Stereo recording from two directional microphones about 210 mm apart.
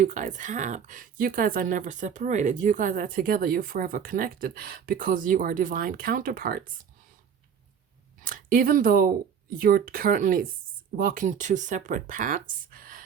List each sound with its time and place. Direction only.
0.0 s speech: 35° right (ahead or behind)
8.2 s speech: 40° right (ahead or behind)